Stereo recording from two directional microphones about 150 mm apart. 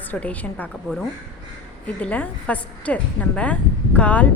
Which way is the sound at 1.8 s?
10° left (ahead or behind).